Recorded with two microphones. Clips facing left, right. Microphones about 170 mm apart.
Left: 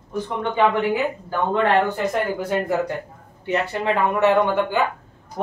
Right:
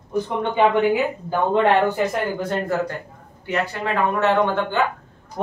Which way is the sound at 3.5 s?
25° left (ahead or behind).